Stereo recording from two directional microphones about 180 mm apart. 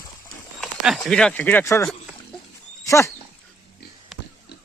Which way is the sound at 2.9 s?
15° left (ahead or behind).